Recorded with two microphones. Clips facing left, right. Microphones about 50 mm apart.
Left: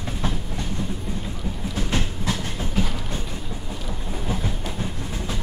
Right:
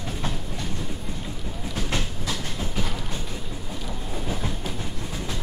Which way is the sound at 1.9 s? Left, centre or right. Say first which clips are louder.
Left 4 dB; left.